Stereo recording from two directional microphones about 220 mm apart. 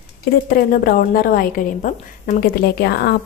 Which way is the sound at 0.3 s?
45° left (ahead or behind).